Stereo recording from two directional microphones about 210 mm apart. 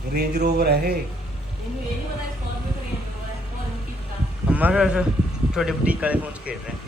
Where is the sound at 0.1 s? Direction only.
50° right (ahead or behind).